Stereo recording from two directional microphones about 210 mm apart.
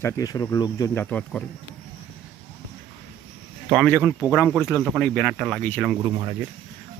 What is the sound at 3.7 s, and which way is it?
Speech, 5° left (ahead or behind).